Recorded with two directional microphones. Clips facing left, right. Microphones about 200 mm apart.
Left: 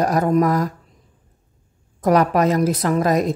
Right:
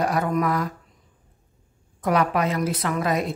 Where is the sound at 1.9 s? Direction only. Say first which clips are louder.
Left 6 dB; 40° left (ahead or behind).